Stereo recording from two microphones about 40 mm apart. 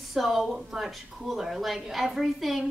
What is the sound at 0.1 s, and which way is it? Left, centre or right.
A woman's voice, centre.